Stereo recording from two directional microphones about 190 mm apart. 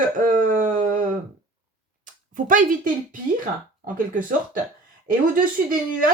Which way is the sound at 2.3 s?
45° right (ahead or behind).